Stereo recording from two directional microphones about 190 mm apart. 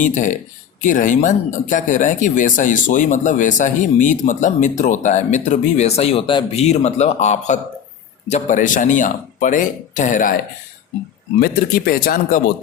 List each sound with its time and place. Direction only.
0.0 s speech: 40° left (ahead or behind)
11.3 s speech: 50° left (ahead or behind)